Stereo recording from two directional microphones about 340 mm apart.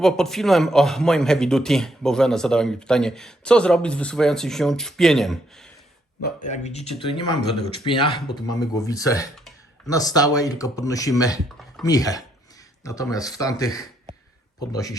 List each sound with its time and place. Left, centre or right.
0.0 s a man's voice: centre
6.2 s speech: left